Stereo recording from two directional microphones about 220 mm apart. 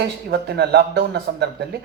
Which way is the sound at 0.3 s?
50° right (ahead or behind).